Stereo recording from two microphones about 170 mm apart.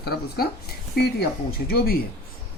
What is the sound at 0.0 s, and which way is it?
Speech, 65° left (ahead or behind).